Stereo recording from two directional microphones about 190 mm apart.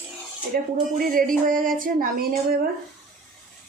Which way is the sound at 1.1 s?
45° right (ahead or behind).